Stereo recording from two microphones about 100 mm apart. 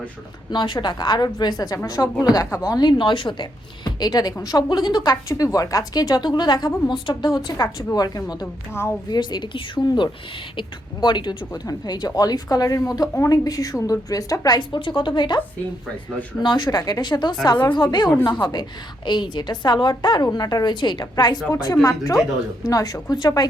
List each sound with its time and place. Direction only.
0.5 s a woman's voice: 50° left (ahead or behind)
3.8 s a woman's voice: 40° left (ahead or behind)
8.7 s a woman's voice: 25° left (ahead or behind)
9.0 s a woman's voice: 45° left (ahead or behind)
16.4 s a woman's voice: 50° left (ahead or behind)
21.5 s a woman's voice: 40° left (ahead or behind)